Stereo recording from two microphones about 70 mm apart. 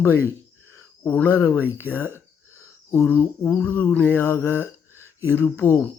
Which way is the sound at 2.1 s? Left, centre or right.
Left.